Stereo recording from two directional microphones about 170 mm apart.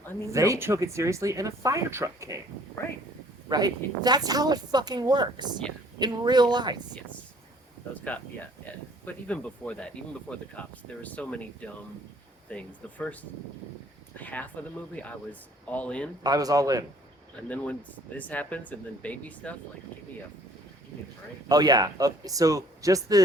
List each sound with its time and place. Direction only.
0.3 s speech: 20° right (ahead or behind)
3.5 s a woman's voice: 25° right (ahead or behind)
7.9 s speech: 10° left (ahead or behind)
14.2 s speech: 10° left (ahead or behind)
16.2 s a woman's voice: 20° right (ahead or behind)
18.2 s speech: 10° left (ahead or behind)
21.5 s a woman's voice: 20° right (ahead or behind)